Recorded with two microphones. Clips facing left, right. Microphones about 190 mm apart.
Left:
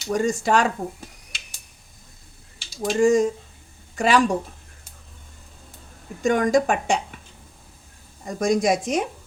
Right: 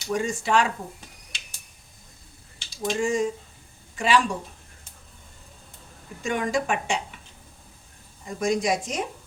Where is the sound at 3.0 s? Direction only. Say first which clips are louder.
Left 9 dB; 45° left (ahead or behind).